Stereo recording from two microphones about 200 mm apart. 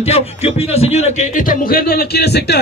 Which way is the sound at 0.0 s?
30° left (ahead or behind).